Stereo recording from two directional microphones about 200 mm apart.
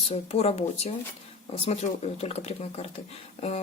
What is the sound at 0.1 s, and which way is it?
A woman's voice, 30° left (ahead or behind).